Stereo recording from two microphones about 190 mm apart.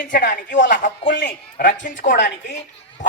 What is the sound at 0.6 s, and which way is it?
Speech, 70° left (ahead or behind).